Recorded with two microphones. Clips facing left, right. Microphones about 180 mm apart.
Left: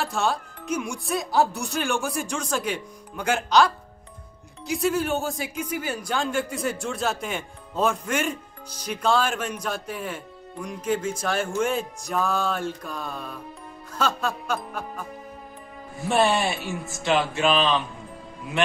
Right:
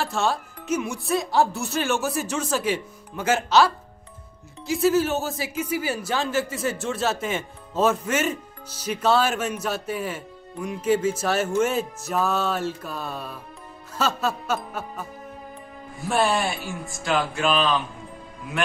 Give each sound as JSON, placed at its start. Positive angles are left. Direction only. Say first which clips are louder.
{"t": 0.0, "sound": "speech", "louder": "right 1 dB", "side_deg": 0}
{"t": 16.1, "sound": "speech", "louder": "left 1 dB", "side_deg": 0}